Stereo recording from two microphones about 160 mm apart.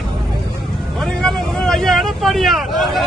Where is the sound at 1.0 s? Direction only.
Centre (ahead or behind).